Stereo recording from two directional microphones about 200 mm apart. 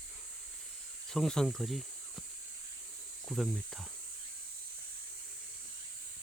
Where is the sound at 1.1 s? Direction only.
Centre (ahead or behind).